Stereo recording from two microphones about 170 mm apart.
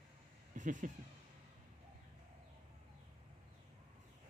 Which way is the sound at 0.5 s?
45° right (ahead or behind).